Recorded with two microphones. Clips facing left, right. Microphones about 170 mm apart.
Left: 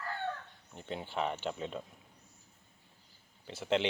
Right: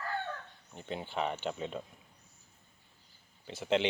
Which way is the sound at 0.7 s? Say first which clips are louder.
Right 1 dB; centre (ahead or behind).